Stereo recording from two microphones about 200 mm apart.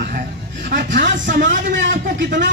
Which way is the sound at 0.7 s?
60° right (ahead or behind).